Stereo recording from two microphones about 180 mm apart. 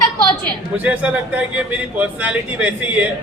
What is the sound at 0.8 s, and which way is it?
A man's voice, 10° right (ahead or behind).